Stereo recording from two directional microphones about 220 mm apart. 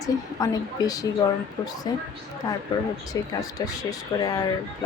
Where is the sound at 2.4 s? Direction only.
20° left (ahead or behind).